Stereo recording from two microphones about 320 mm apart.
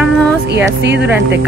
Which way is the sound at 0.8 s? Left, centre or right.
Right.